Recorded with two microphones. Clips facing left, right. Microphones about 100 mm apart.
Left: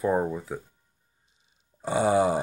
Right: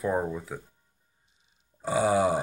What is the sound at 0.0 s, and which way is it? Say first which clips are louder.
Speech: left 3 dB; 5° left (ahead or behind).